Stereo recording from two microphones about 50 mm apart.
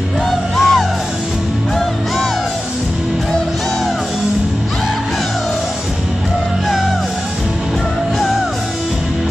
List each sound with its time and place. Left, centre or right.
0.3 s music: centre